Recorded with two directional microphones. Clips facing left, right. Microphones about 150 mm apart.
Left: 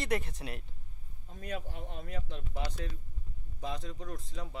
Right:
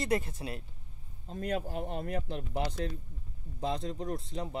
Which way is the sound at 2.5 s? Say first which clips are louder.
Right 5 dB; 35° right (ahead or behind).